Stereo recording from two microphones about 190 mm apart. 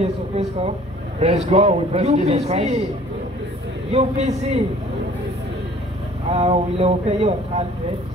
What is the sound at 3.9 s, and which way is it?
Speech, 35° right (ahead or behind).